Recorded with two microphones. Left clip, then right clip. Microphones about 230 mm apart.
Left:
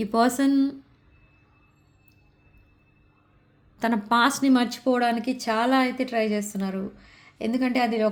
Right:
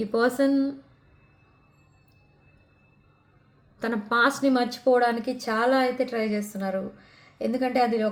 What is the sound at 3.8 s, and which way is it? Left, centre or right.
A woman's voice, left.